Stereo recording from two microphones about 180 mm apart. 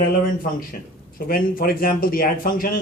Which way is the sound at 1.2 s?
55° left (ahead or behind).